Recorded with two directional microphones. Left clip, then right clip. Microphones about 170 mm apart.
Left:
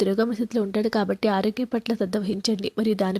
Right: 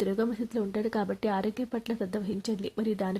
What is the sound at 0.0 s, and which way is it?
A woman's voice, 25° left (ahead or behind).